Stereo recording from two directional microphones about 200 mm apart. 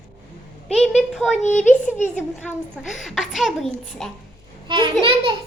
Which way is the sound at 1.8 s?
10° left (ahead or behind).